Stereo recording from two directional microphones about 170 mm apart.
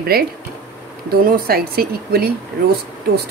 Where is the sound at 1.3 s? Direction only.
65° right (ahead or behind).